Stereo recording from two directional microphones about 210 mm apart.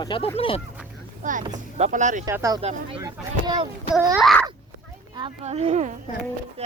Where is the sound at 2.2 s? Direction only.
15° right (ahead or behind).